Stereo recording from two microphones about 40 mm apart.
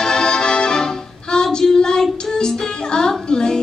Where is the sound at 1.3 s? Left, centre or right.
Centre.